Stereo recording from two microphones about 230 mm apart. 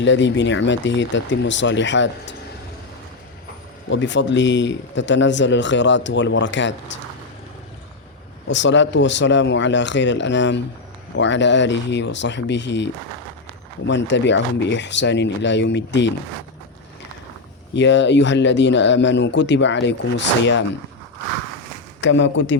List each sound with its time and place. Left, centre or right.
0.0 s speech: left
3.8 s speech: left
8.4 s speech: left
17.7 s speech: left
22.0 s speech: left